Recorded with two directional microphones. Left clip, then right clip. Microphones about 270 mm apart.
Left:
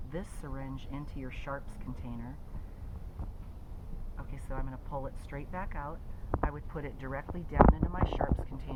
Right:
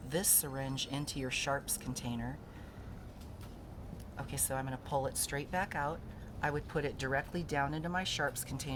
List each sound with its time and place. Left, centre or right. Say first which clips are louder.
0.1 s speech: right 7 dB; right
4.2 s speech: right 5 dB; right